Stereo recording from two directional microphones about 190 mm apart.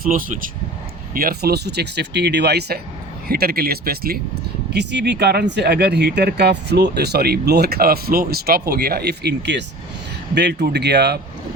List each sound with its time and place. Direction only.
0.0 s speech: 45° right (ahead or behind)